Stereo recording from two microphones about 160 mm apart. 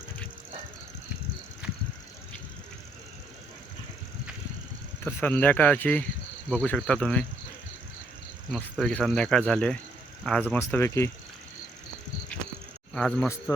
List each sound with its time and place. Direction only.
5.0 s speech: 10° left (ahead or behind)
8.4 s speech: centre (ahead or behind); by 11.1 s 15° left (ahead or behind)
12.9 s speech: 5° left (ahead or behind)